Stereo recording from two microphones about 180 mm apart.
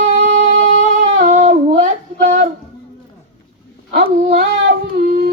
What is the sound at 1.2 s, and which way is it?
Female singing, 40° right (ahead or behind).